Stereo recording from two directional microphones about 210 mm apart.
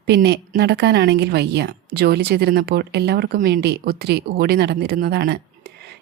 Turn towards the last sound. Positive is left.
turn(degrees=-50)  # may be behind; listen again after turning